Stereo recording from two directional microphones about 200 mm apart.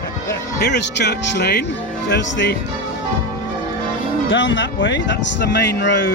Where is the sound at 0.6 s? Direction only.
60° left (ahead or behind).